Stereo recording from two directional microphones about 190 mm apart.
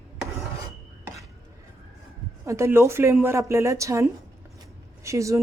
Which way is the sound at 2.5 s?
15° right (ahead or behind).